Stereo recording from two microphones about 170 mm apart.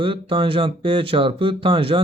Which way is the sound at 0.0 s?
30° right (ahead or behind).